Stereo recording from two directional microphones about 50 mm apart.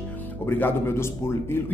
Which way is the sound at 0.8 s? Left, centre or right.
Left.